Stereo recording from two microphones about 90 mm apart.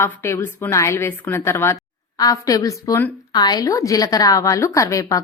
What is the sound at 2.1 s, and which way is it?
A woman's voice, 40° left (ahead or behind).